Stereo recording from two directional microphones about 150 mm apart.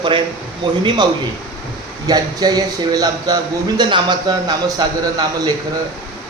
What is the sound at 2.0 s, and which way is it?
A man's voice, 25° right (ahead or behind).